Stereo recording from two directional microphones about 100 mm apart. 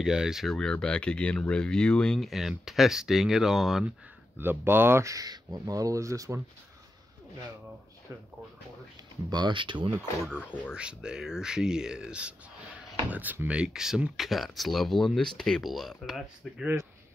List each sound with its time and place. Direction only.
0.0 s speech: 5° right (ahead or behind)
4.4 s speech: 20° right (ahead or behind)
9.3 s speech: 50° right (ahead or behind)
10.7 s speech: 10° right (ahead or behind)